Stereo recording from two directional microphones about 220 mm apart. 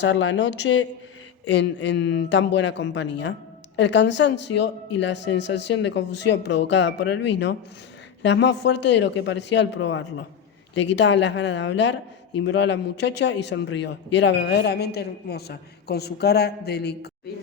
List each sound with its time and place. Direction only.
0.0 s a man's voice: 60° left (ahead or behind)